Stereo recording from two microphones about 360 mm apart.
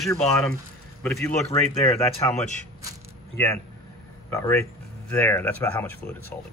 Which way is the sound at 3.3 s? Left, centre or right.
Centre.